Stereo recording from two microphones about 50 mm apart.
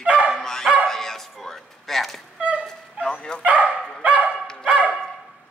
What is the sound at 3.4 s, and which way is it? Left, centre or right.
Speech, right.